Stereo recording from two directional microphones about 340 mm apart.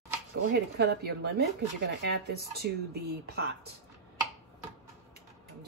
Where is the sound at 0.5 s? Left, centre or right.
Right.